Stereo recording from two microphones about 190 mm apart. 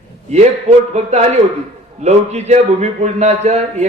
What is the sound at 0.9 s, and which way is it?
Speech, 35° right (ahead or behind).